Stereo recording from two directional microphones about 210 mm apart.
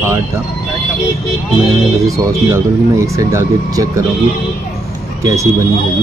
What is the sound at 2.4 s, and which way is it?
Speech, 15° right (ahead or behind).